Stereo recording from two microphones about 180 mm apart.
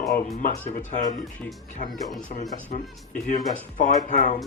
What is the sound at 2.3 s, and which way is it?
Speech, 40° left (ahead or behind).